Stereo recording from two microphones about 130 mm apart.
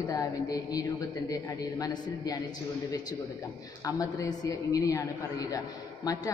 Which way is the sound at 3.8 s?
25° left (ahead or behind).